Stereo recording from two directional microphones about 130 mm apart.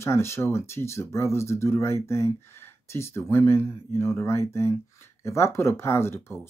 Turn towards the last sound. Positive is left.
turn(degrees=20)  # may be behind; listen again after turning